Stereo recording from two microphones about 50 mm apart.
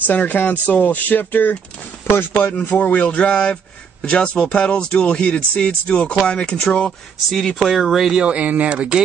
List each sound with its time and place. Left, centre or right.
0.0 s speech: left
2.6 s speech: left
7.2 s speech: centre
7.7 s speech: centre
8.1 s speech: right